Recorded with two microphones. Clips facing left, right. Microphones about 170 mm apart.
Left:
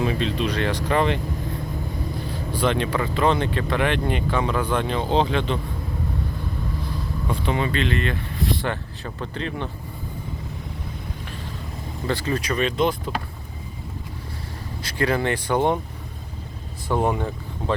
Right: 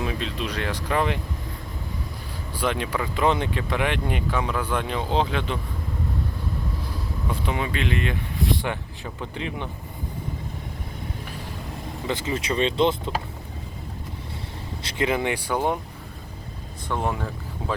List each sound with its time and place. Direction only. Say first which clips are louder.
0.0 s speech: left 5 dB; centre (ahead or behind)
2.6 s speech: left 3 dB; 5° right (ahead or behind)
7.3 s speech: left 3 dB; 5° right (ahead or behind)
12.0 s speech: left 2 dB; 20° right (ahead or behind)
14.8 s speech: left 2 dB; 20° right (ahead or behind)
16.9 s speech: left 5 dB; centre (ahead or behind)